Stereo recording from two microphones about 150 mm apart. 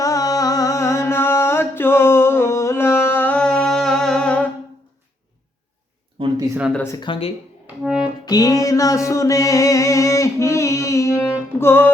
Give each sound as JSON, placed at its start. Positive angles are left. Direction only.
{"t": 0.0, "sound": "music", "side_deg": 20}
{"t": 6.1, "sound": "a sound", "side_deg": -35}
{"t": 6.7, "sound": "speech", "side_deg": 20}
{"t": 7.0, "sound": "speech", "side_deg": 35}
{"t": 7.9, "sound": "music", "side_deg": -5}
{"t": 8.2, "sound": "music", "side_deg": 25}